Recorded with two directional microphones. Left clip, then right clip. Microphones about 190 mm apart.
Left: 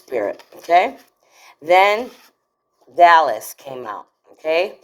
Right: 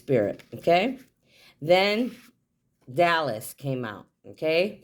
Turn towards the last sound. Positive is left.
turn(degrees=-45)  # may be behind; listen again after turning